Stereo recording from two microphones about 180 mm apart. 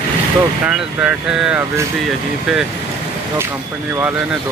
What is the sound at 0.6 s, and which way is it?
Speech, 5° right (ahead or behind).